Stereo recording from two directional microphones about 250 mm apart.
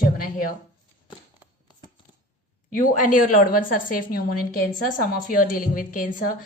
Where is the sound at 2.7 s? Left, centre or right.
Left.